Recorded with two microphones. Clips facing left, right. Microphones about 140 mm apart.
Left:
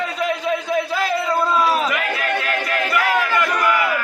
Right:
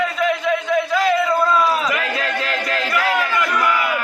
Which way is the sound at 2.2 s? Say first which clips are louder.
Even; 25° right (ahead or behind).